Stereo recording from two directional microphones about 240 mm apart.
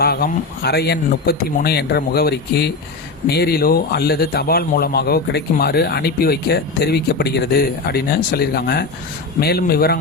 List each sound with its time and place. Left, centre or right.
0.0 s a man's voice: left